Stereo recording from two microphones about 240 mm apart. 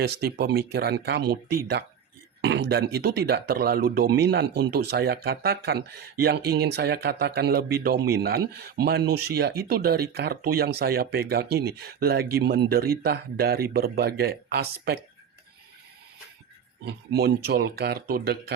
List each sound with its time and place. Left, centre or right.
0.0 s speech: right
16.8 s speech: right